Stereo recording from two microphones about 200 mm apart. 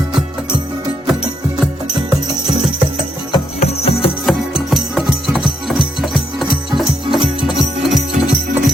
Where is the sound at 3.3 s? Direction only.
30° left (ahead or behind).